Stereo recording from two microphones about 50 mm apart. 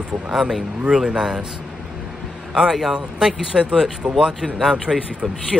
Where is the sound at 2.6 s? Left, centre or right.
Centre.